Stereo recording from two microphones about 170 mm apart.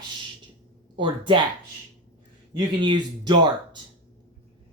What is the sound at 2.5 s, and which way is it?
Speech, 25° right (ahead or behind).